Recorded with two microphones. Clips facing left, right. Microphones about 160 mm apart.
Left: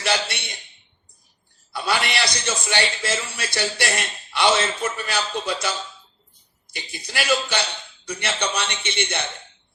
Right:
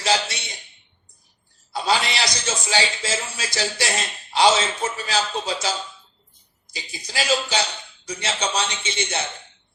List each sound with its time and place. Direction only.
0.0 s a sound: 60° left (ahead or behind)
1.7 s a man's voice: 60° left (ahead or behind)
6.7 s a man's voice: 65° left (ahead or behind)